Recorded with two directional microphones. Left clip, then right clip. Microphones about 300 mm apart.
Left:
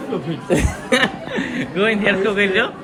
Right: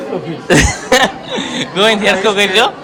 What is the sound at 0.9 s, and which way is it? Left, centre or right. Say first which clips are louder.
A man's voice: right 6 dB; centre.